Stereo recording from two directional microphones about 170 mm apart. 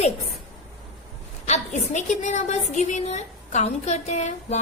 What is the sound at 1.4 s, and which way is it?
A woman's voice, 40° left (ahead or behind).